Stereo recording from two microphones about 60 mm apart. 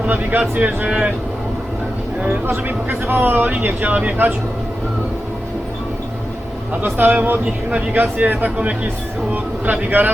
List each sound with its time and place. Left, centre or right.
0.0 s speech: right
2.5 s speech: right
6.8 s speech: right
7.2 s speech: right